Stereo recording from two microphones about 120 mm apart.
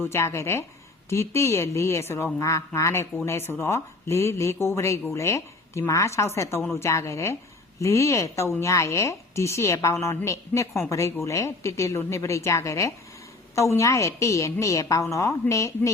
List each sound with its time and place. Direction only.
0.0 s a woman's voice: 20° left (ahead or behind)